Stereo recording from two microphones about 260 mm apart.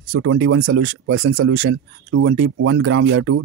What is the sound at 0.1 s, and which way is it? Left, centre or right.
Speech, right.